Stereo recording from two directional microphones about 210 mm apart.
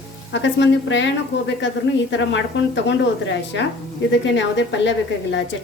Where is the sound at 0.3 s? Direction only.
60° left (ahead or behind).